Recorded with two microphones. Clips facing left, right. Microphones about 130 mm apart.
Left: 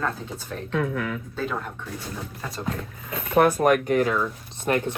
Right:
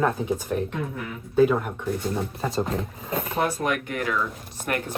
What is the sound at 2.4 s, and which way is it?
Speech, 25° right (ahead or behind).